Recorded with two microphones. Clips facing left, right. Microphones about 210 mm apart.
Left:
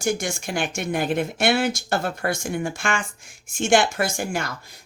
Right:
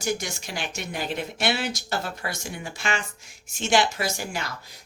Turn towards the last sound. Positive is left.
turn(degrees=50)  # may be behind; listen again after turning